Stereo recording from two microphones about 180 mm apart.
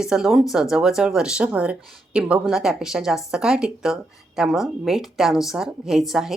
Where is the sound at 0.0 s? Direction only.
5° right (ahead or behind).